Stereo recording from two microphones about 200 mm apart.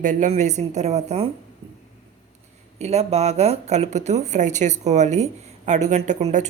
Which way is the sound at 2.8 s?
30° right (ahead or behind).